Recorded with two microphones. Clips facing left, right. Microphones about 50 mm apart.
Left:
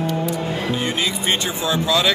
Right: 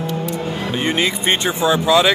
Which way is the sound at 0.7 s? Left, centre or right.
Right.